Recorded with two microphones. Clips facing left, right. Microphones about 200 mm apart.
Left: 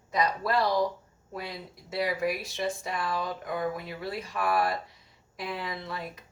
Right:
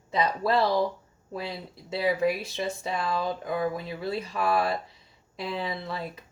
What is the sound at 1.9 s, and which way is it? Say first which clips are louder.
Speech: right 4 dB; 25° right (ahead or behind).